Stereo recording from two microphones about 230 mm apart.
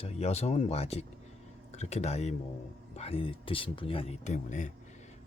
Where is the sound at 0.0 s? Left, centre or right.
Left.